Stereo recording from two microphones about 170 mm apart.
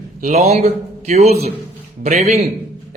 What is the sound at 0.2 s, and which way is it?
A man's voice, 40° right (ahead or behind).